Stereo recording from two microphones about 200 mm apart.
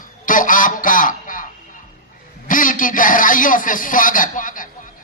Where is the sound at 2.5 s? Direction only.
40° left (ahead or behind).